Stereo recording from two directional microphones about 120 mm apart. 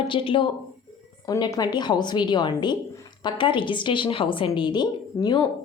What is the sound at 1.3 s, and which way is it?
A woman's voice, 35° left (ahead or behind).